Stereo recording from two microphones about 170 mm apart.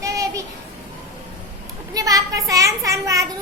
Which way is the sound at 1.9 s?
20° right (ahead or behind).